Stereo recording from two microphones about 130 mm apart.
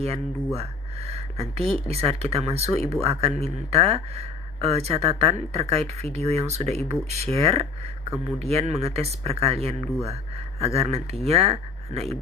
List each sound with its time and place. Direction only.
0.0 s speech: 50° right (ahead or behind)